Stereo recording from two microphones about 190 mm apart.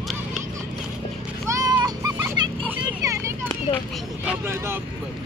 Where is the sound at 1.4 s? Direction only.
15° right (ahead or behind).